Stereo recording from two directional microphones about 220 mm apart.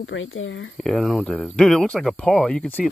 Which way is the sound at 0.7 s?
Centre (ahead or behind).